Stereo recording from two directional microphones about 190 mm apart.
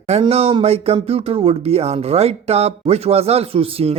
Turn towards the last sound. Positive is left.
turn(degrees=-30)  # may be behind; listen again after turning